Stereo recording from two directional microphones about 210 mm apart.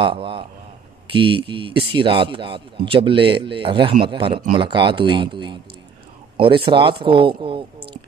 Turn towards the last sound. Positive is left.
turn(degrees=-25)  # may be behind; listen again after turning